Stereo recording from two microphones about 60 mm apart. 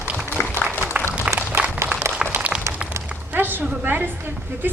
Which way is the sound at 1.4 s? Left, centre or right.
Right.